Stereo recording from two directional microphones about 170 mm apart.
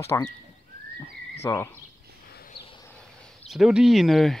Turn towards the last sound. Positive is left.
turn(degrees=0)  # may be behind; listen again after turning